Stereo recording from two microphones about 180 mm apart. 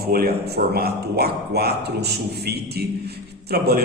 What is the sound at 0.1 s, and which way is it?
Speech, 60° right (ahead or behind).